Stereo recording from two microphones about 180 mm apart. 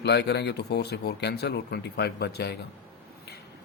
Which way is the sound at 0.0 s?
70° left (ahead or behind).